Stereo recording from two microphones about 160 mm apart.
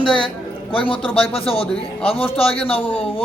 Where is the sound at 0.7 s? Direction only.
30° left (ahead or behind).